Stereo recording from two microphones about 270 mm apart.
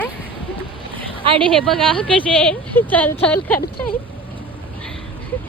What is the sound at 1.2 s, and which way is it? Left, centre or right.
Speech, centre.